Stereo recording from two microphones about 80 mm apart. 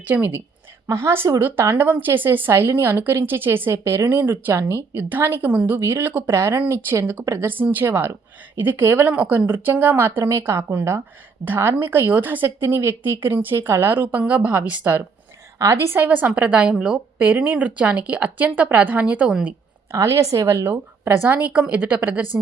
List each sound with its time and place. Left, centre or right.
0.1 s a woman's voice: right
15.5 s a woman's voice: right
16.0 s a woman's voice: centre
19.9 s speech: right
21.2 s a woman's voice: centre